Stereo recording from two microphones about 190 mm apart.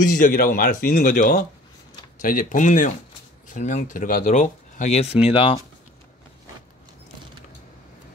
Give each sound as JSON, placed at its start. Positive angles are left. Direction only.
{"t": 0.1, "sound": "speech", "side_deg": 45}